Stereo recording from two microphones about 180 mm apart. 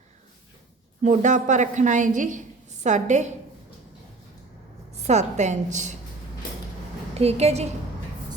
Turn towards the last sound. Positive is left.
turn(degrees=-35)  # may be behind; listen again after turning